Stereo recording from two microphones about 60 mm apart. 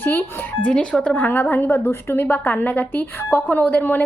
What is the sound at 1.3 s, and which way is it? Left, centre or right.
A woman's voice, left.